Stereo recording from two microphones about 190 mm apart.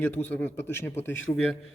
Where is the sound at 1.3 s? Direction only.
30° left (ahead or behind).